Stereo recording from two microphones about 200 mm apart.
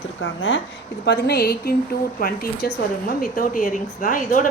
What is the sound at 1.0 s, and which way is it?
A woman's voice, 55° left (ahead or behind).